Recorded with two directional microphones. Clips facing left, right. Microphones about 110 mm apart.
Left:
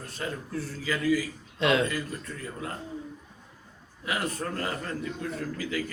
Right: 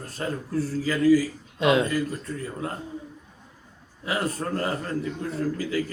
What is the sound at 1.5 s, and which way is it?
Speech, 15° right (ahead or behind).